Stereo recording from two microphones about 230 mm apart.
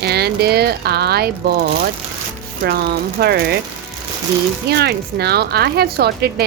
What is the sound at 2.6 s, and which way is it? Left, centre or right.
Speech, right.